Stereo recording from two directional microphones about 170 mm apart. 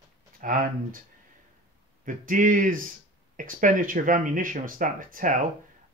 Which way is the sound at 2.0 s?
50° right (ahead or behind).